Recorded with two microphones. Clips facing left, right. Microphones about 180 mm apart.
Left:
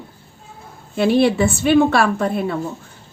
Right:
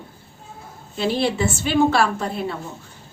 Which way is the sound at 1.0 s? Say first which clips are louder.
Left 6 dB; 60° left (ahead or behind).